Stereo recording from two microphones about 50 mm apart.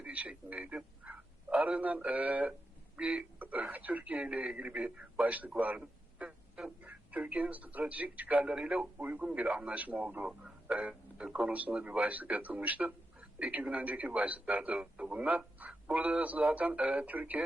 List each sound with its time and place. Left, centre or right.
0.0 s a sound: right
1.7 s speech: right
5.8 s a sound: right
6.7 s speech: right
8.5 s speech: centre
9.0 s speech: right
9.7 s speech: right
11.2 s speech: centre
11.8 s speech: right
14.8 s speech: centre